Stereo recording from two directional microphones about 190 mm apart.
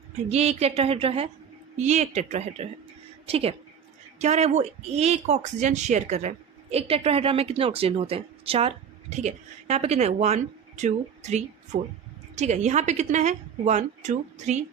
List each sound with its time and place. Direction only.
0.3 s speech: 35° right (ahead or behind)